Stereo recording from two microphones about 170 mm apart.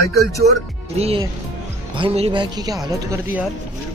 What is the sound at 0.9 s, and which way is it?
Speech, 35° right (ahead or behind).